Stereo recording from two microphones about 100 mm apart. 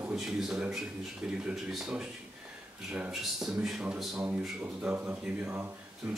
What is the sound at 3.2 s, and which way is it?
Speech, centre (ahead or behind).